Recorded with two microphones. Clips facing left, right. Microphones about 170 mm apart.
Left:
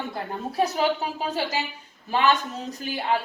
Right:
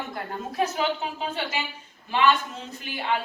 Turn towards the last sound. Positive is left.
turn(degrees=40)  # may be behind; listen again after turning